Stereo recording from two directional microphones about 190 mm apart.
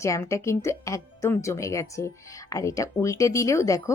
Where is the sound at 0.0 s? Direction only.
15° left (ahead or behind).